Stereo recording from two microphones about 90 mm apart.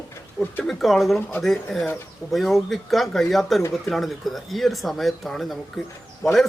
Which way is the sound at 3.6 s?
35° left (ahead or behind).